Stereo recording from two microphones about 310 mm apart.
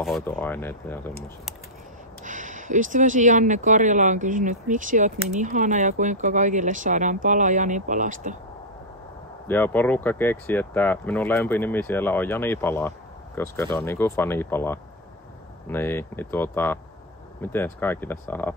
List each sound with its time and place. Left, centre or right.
0.0 s speech: centre
2.2 s speech: right
9.5 s speech: centre